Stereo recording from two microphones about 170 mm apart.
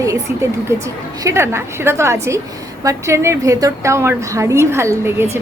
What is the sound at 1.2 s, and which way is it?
A woman's voice, 15° right (ahead or behind).